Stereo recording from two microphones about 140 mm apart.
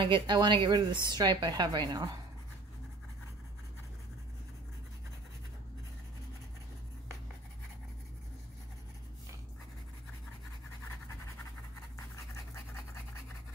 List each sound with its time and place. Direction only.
0.0 s a woman's voice: 35° right (ahead or behind)